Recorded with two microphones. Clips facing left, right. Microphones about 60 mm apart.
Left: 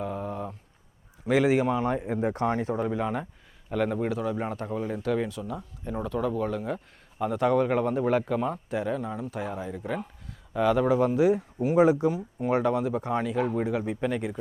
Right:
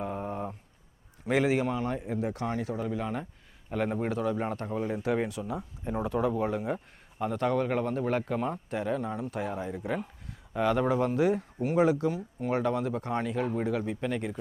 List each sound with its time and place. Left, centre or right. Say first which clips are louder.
0.0 s a sound: left 1 dB; centre
1.5 s speech: left 4 dB; centre
1.8 s speech: left 4 dB; left
3.0 s speech: left 4 dB; centre
3.7 s speech: left 3 dB; centre
5.0 s speech: left 1 dB; right
6.7 s speech: left 3 dB; centre
7.3 s speech: left 5 dB; centre
8.3 s speech: left 3 dB; centre
10.9 s speech: left 4 dB; centre